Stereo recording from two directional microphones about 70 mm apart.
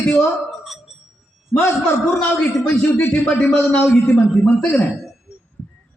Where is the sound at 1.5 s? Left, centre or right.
Centre.